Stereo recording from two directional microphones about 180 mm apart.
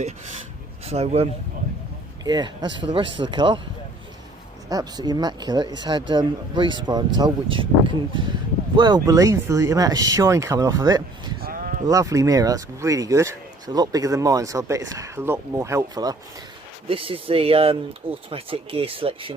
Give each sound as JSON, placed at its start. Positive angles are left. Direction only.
{"t": 0.9, "sound": "speech", "side_deg": -35}
{"t": 2.2, "sound": "speech", "side_deg": -20}
{"t": 4.7, "sound": "speech", "side_deg": -20}
{"t": 11.4, "sound": "a sound", "side_deg": -50}
{"t": 11.9, "sound": "speech", "side_deg": -20}
{"t": 16.9, "sound": "speech", "side_deg": -30}